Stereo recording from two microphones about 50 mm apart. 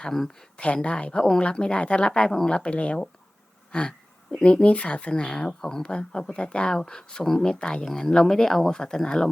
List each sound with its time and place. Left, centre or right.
0.5 s speech: left